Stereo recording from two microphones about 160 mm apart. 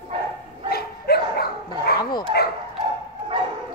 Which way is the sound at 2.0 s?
25° left (ahead or behind).